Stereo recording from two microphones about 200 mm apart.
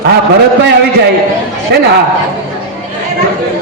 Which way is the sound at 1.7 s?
55° right (ahead or behind).